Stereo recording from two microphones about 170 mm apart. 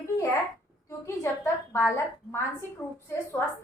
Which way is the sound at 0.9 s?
15° left (ahead or behind).